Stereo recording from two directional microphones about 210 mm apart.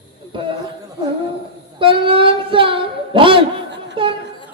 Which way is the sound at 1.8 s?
25° right (ahead or behind).